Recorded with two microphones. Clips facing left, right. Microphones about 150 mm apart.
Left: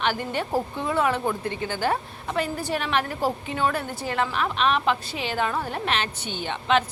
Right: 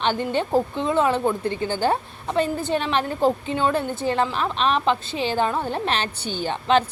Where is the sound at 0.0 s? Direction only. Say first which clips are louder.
Right 4 dB; 25° right (ahead or behind).